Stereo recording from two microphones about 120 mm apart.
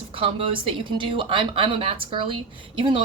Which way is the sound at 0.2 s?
50° right (ahead or behind).